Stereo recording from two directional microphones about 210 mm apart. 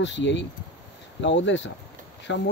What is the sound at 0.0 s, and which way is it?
Speech, 60° left (ahead or behind).